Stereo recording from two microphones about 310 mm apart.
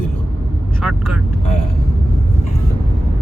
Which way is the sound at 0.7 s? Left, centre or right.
Centre.